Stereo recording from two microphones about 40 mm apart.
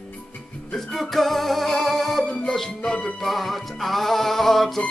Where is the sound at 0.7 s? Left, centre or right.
Centre.